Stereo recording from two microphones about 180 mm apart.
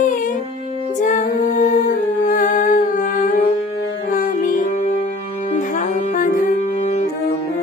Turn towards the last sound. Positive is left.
turn(degrees=40)  # may be behind; listen again after turning